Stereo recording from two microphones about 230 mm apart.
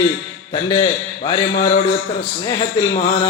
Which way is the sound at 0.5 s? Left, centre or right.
Centre.